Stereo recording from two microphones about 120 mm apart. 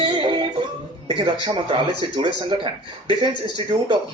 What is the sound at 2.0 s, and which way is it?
A man's voice, 40° right (ahead or behind).